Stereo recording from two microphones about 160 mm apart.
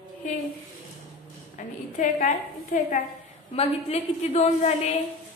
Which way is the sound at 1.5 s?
55° left (ahead or behind).